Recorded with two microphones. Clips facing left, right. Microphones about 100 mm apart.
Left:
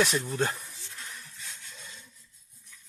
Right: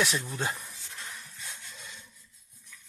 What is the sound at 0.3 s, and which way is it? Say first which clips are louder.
Speech: left 4 dB; centre (ahead or behind).